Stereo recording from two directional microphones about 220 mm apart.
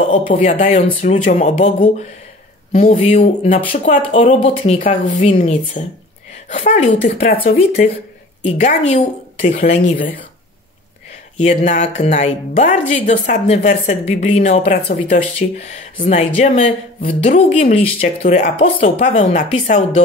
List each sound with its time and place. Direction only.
0.3 s speech: 40° left (ahead or behind)
0.7 s speech: 30° left (ahead or behind)
8.5 s speech: 30° left (ahead or behind)
11.3 s speech: 30° left (ahead or behind)